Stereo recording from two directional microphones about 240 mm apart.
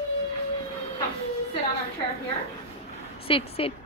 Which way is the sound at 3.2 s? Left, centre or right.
Left.